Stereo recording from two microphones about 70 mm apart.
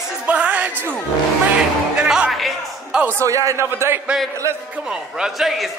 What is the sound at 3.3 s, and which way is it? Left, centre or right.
Speech, right.